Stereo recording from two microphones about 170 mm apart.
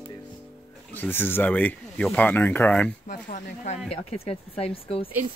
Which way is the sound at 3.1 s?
50° left (ahead or behind).